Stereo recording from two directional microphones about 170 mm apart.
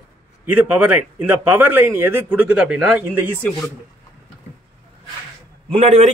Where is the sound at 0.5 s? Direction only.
10° right (ahead or behind).